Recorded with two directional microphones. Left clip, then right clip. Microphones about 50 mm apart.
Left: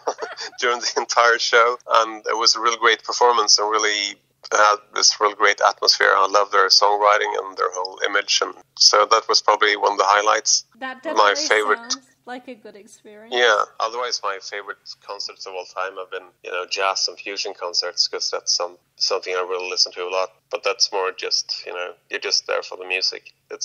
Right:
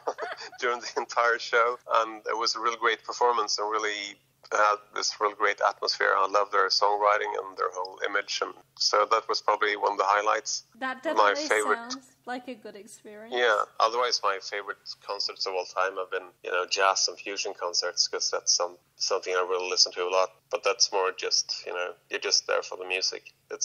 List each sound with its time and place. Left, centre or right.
0.0 s speech: left
13.3 s speech: centre
13.7 s speech: centre
15.5 s speech: centre